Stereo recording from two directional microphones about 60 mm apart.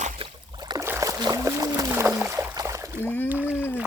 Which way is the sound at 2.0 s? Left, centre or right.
Right.